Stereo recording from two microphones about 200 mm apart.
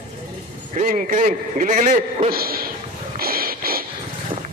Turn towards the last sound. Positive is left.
turn(degrees=-50)  # may be behind; listen again after turning